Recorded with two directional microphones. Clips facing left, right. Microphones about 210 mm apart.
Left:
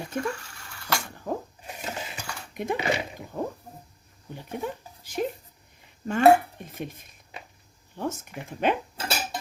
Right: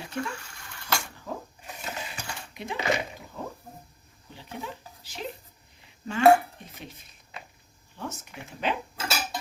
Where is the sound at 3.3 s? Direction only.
55° left (ahead or behind).